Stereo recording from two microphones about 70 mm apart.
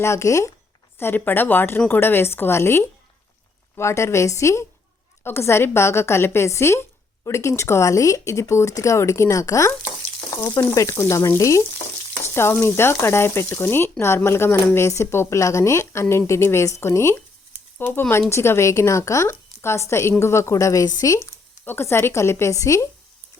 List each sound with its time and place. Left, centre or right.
0.0 s speech: left
0.9 s speech: left
12.2 s speech: left
17.7 s speech: left
21.6 s speech: left